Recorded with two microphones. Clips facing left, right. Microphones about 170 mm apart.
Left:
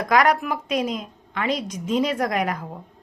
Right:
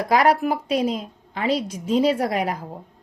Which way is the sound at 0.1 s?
30° right (ahead or behind).